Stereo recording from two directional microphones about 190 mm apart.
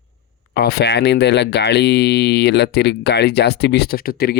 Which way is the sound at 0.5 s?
55° left (ahead or behind).